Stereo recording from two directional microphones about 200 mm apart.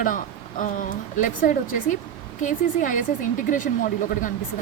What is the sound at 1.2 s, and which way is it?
Speech, 40° left (ahead or behind).